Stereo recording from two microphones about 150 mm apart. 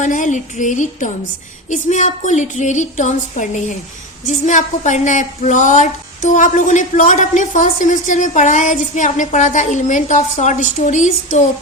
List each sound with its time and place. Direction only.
0.0 s a woman's voice: 55° left (ahead or behind)